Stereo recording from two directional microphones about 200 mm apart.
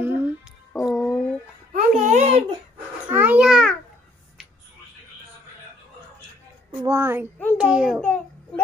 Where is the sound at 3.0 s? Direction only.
5° right (ahead or behind).